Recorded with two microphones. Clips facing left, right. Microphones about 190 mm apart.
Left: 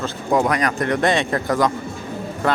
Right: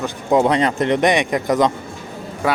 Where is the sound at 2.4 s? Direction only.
10° right (ahead or behind).